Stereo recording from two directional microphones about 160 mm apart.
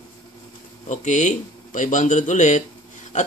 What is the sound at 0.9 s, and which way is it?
Speech, 50° left (ahead or behind).